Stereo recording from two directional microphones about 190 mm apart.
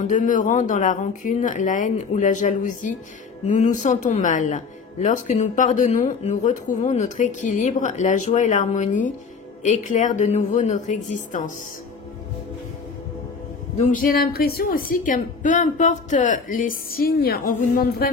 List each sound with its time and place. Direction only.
0.0 s speech: 40° left (ahead or behind)
13.7 s a woman's voice: 40° left (ahead or behind)